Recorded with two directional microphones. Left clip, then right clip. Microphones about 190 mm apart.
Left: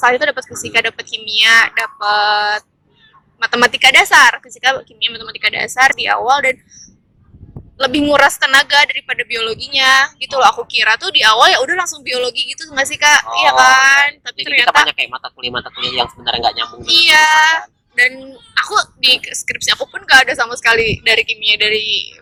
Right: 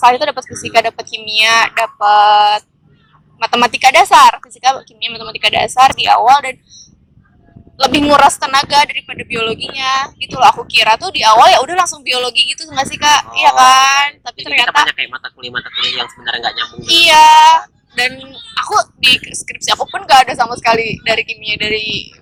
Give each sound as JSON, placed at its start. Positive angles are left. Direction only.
{"t": 0.0, "sound": "a woman's voice", "side_deg": -20}
{"t": 7.8, "sound": "a woman's voice", "side_deg": -20}
{"t": 14.8, "sound": "speech", "side_deg": 0}
{"t": 16.8, "sound": "a woman's voice", "side_deg": -15}